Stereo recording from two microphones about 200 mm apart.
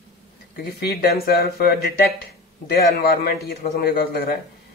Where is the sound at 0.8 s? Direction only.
50° left (ahead or behind).